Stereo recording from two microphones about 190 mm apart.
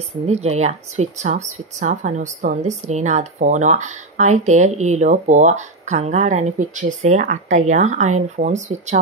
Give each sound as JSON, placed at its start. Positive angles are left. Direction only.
{"t": 0.3, "sound": "speech", "side_deg": -35}